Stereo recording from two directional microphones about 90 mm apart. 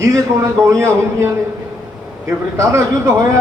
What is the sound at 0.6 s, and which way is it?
Speech, 30° right (ahead or behind).